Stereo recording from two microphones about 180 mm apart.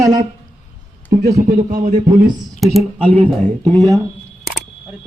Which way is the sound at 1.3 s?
45° right (ahead or behind).